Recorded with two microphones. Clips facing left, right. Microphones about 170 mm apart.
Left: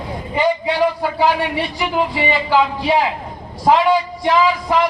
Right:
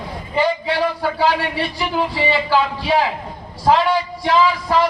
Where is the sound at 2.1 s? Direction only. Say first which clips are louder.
Even; 20° left (ahead or behind).